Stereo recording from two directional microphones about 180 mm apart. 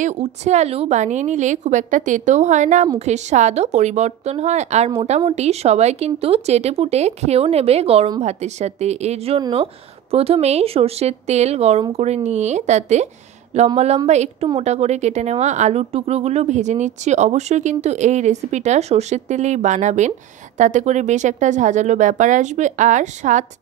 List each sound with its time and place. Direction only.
0.0 s a woman's voice: 40° right (ahead or behind)